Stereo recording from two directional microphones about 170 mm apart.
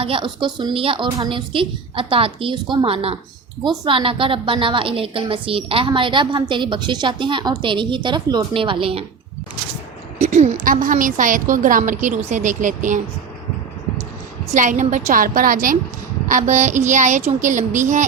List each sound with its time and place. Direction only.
0.0 s a woman's voice: 30° right (ahead or behind)
10.2 s a woman's voice: 45° right (ahead or behind)
14.5 s a woman's voice: 50° right (ahead or behind)